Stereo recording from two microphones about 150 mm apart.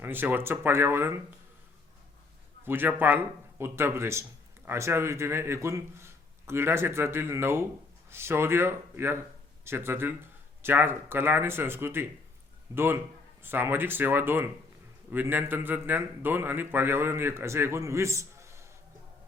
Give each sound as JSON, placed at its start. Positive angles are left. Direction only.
{"t": 0.0, "sound": "a man's voice", "side_deg": -15}
{"t": 2.6, "sound": "a man's voice", "side_deg": -15}